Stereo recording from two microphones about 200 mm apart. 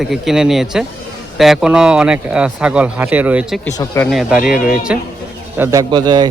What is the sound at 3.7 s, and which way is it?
Speech, 15° left (ahead or behind).